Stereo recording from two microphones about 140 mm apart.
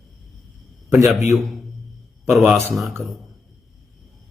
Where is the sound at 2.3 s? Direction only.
Centre (ahead or behind).